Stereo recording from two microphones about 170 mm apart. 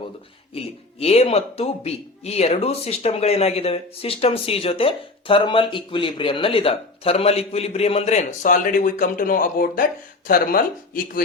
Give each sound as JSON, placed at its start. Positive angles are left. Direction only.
{"t": 0.5, "sound": "speech", "side_deg": 35}